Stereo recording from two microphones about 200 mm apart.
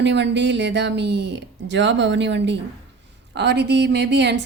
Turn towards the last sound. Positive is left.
turn(degrees=-60)  # may be behind; listen again after turning